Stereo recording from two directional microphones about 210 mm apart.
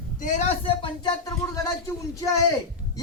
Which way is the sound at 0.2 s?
35° left (ahead or behind).